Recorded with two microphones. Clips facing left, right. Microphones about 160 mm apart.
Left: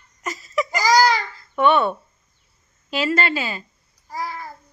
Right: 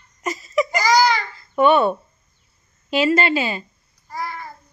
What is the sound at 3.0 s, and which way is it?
Speech, 15° right (ahead or behind).